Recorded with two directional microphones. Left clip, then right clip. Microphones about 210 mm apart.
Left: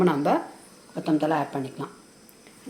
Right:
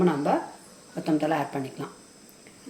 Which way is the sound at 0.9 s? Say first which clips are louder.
Left 2 dB; 15° left (ahead or behind).